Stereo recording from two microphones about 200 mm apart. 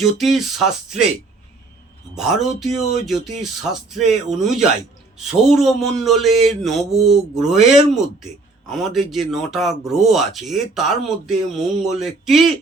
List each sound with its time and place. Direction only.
0.0 s a man's voice: centre (ahead or behind)
2.1 s a man's voice: centre (ahead or behind)